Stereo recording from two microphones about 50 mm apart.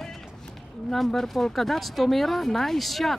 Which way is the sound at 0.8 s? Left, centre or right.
Centre.